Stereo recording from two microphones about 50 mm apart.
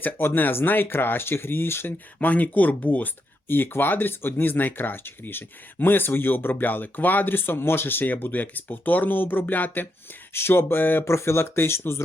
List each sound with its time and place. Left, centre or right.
0.0 s speech: left
2.1 s speech: left
3.5 s speech: left
10.3 s speech: left
11.1 s speech: left